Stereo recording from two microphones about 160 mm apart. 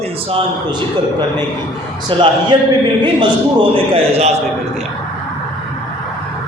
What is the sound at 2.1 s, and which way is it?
Speech, 35° right (ahead or behind).